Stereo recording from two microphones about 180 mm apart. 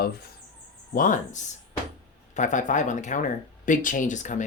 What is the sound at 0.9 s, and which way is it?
Speech, 45° left (ahead or behind).